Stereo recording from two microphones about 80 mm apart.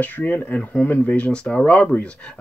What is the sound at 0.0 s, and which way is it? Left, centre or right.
Speech, left.